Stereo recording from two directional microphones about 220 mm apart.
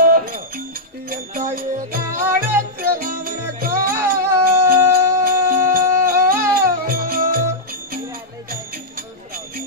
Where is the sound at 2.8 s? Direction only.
40° right (ahead or behind).